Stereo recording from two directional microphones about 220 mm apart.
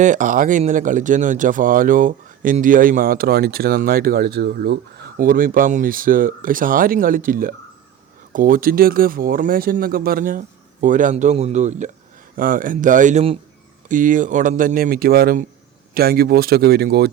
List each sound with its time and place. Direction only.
0.0 s speech: 35° right (ahead or behind)